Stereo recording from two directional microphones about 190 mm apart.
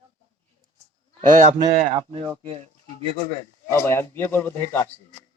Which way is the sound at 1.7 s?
35° right (ahead or behind).